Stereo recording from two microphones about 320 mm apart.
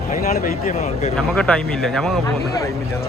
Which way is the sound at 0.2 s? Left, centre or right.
Left.